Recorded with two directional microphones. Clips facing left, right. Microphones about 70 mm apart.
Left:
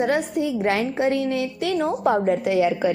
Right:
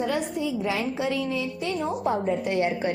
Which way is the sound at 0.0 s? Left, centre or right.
Left.